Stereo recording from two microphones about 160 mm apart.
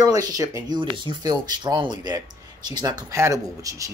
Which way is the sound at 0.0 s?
20° right (ahead or behind).